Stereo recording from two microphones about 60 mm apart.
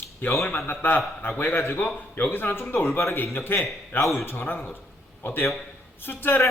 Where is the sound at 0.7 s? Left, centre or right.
Left.